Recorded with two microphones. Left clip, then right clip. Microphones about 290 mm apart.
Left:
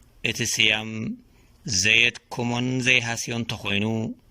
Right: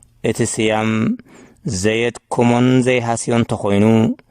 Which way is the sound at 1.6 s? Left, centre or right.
Right.